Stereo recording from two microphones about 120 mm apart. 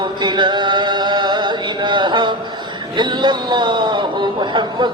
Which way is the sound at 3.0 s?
40° right (ahead or behind).